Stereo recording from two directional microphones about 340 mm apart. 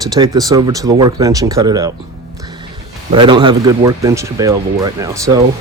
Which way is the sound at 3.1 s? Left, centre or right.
Centre.